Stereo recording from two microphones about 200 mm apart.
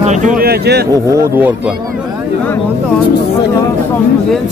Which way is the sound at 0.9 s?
15° right (ahead or behind).